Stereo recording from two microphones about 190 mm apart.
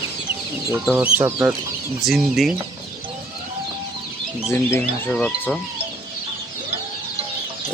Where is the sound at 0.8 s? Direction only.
10° right (ahead or behind).